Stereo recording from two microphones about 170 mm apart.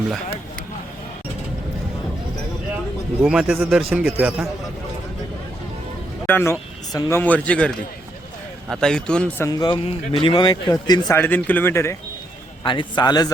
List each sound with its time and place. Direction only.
3.2 s a man's voice: 5° right (ahead or behind)
6.2 s a sound: 15° left (ahead or behind)
7.1 s speech: 10° left (ahead or behind)
9.5 s speech: 25° left (ahead or behind)
11.2 s speech: 10° left (ahead or behind)
12.6 s speech: 25° left (ahead or behind)